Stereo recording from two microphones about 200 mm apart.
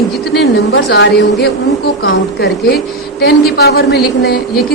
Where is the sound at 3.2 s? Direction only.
55° left (ahead or behind).